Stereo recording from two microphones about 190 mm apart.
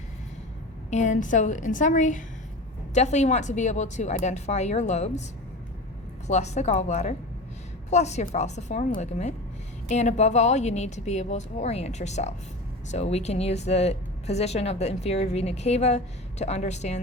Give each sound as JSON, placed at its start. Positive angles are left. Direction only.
{"t": 0.9, "sound": "speech", "side_deg": 40}
{"t": 6.2, "sound": "speech", "side_deg": 35}